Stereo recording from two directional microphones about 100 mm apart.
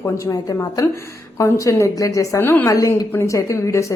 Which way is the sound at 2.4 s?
20° left (ahead or behind).